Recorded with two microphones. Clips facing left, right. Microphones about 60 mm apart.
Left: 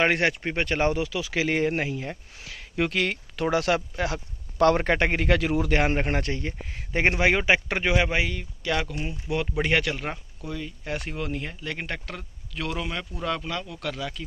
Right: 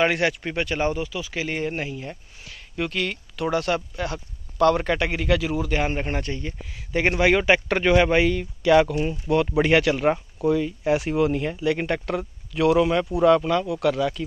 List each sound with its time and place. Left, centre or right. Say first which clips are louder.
0.0 s speech: right 1 dB; left
0.7 s speech: left 2 dB; left
6.9 s a man's voice: right 3 dB; left; by 9.9 s centre
9.9 s speech: right 11 dB; centre